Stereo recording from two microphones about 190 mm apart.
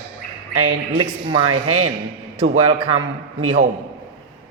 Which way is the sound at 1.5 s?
90° right.